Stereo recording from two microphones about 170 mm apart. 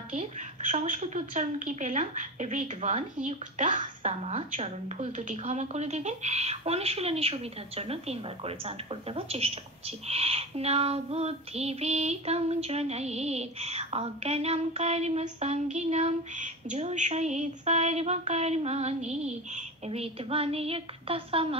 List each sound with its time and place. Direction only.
0.1 s a woman's voice: 45° right (ahead or behind)